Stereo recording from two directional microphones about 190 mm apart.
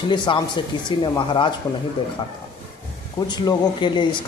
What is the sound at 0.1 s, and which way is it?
Speech, 25° left (ahead or behind).